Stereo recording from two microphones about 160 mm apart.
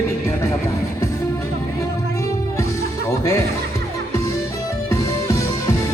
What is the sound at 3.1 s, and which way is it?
Speech, 15° left (ahead or behind).